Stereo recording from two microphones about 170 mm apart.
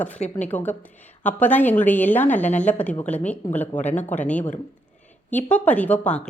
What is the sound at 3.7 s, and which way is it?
Speech, 45° left (ahead or behind).